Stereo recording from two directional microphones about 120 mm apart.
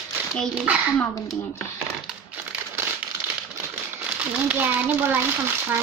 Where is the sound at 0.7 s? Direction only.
10° right (ahead or behind).